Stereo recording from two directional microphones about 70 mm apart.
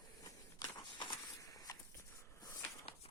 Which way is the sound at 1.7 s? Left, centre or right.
Left.